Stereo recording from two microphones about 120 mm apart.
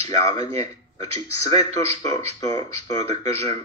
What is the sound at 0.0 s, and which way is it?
A man's voice, 60° right (ahead or behind).